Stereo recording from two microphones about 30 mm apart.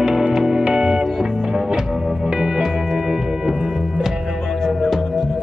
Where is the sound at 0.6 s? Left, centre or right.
Right.